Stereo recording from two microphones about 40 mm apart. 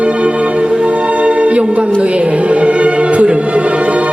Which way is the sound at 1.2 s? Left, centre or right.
Right.